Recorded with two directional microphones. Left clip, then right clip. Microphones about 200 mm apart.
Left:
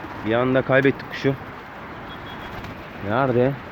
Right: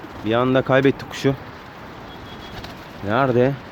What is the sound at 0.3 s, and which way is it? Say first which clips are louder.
Speech: right 2 dB; 15° right (ahead or behind).